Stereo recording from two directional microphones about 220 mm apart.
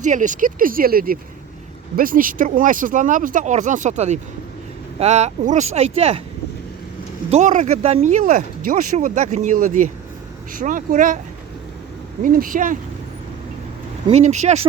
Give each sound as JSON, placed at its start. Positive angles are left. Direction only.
{"t": 0.0, "sound": "speech", "side_deg": -35}
{"t": 7.3, "sound": "speech", "side_deg": -30}
{"t": 12.2, "sound": "speech", "side_deg": -40}
{"t": 14.1, "sound": "speech", "side_deg": -30}